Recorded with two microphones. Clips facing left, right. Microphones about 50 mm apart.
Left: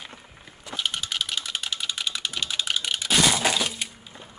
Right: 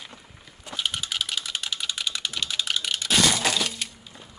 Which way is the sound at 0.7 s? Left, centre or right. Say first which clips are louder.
Even; centre.